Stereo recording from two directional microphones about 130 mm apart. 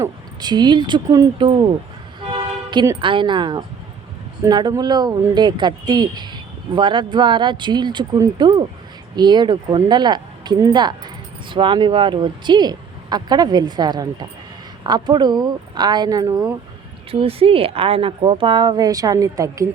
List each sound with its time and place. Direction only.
0.4 s speech: 35° right (ahead or behind)
2.3 s toot: 35° right (ahead or behind)
3.0 s speech: 40° right (ahead or behind)
17.1 s speech: 45° right (ahead or behind); by 19.6 s 25° right (ahead or behind)